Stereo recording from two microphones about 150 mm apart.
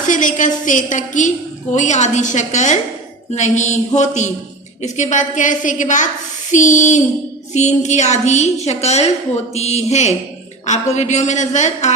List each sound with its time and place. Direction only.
0.0 s a woman's voice: 60° left (ahead or behind)